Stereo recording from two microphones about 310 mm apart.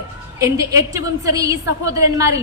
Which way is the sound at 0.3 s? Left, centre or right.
Centre.